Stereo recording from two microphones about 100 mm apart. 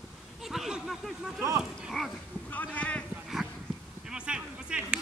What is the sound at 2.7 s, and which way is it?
Speech, 15° left (ahead or behind).